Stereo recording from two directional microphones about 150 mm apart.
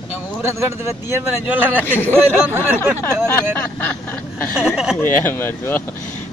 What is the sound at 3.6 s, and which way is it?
Speech, 15° left (ahead or behind).